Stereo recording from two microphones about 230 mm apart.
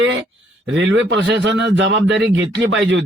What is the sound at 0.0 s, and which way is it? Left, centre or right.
Speech, right.